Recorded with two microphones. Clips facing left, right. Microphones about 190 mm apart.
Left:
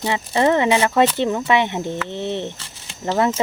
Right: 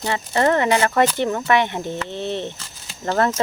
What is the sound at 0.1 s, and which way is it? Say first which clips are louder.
Speech: left 1 dB; 15° left (ahead or behind).